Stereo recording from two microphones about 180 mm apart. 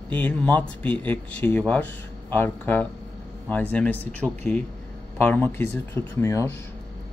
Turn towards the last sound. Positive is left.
turn(degrees=15)  # may be behind; listen again after turning